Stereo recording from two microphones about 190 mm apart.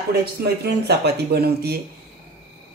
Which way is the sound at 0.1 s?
55° right (ahead or behind).